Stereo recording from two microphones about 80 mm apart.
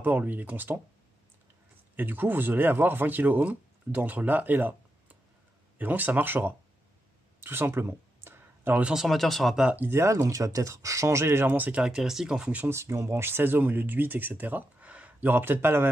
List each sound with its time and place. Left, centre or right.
0.0 s speech: right
2.0 s speech: right
7.3 s a sound: right
8.8 s speech: centre
9.8 s speech: right
10.1 s speech: right; by 12.6 s centre
12.6 s speech: right